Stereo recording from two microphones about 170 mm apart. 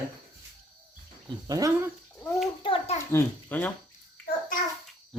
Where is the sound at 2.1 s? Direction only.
Centre (ahead or behind).